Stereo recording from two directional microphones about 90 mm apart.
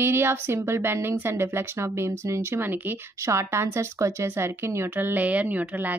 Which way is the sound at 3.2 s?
35° right (ahead or behind).